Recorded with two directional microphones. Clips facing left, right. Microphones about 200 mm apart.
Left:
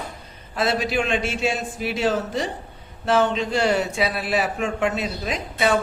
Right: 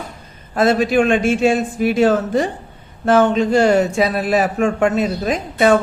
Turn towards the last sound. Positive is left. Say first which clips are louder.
# right 8 dB
turn(degrees=-50)  # may be behind; listen again after turning